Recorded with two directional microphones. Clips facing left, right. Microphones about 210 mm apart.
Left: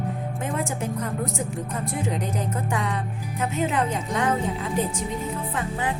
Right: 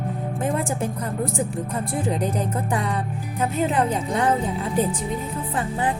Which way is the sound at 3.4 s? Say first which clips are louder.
Right 3 dB; 35° right (ahead or behind).